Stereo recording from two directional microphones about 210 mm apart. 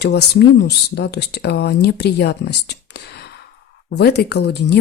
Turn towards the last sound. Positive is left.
turn(degrees=50)  # may be behind; listen again after turning